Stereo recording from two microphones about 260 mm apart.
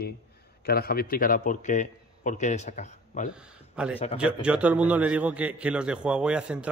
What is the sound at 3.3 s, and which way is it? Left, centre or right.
A man's voice, centre.